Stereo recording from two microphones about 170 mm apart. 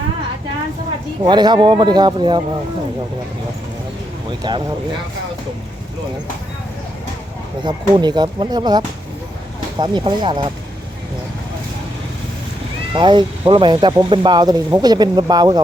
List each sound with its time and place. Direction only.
1.2 s speech: 25° right (ahead or behind)
4.3 s speech: 25° right (ahead or behind)
7.6 s speech: 25° right (ahead or behind)
12.9 s speech: 25° right (ahead or behind)